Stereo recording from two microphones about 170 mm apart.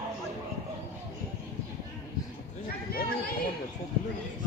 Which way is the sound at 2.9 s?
60° left (ahead or behind).